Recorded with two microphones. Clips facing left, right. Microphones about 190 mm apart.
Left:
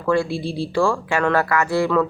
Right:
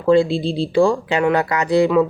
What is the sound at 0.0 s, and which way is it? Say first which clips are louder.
Speech: right 6 dB; 20° right (ahead or behind).